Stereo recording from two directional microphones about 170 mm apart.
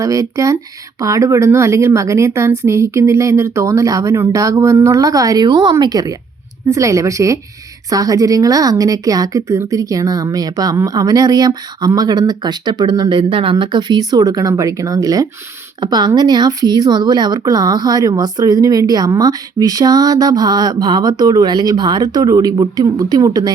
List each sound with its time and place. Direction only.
0.0 s a woman's voice: 20° right (ahead or behind)